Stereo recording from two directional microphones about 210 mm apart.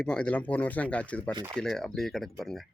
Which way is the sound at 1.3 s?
20° right (ahead or behind).